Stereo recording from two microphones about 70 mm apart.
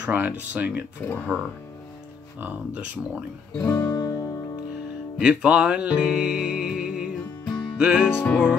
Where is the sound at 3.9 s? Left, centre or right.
Left.